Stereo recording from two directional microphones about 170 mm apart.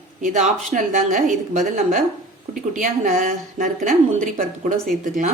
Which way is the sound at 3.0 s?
55° right (ahead or behind).